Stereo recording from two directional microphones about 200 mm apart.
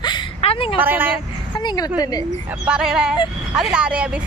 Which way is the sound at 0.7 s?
10° right (ahead or behind).